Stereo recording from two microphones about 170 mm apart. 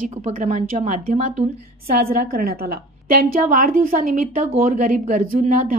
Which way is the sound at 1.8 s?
60° right (ahead or behind).